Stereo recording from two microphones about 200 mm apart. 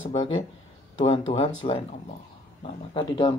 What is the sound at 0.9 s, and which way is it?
Speech, 25° left (ahead or behind).